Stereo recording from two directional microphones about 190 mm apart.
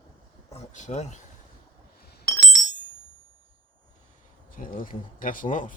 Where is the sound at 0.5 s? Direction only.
40° left (ahead or behind).